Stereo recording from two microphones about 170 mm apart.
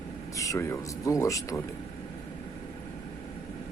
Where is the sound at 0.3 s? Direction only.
20° left (ahead or behind).